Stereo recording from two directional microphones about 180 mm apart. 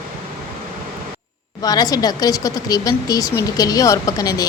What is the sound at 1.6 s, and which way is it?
Speech, 20° left (ahead or behind).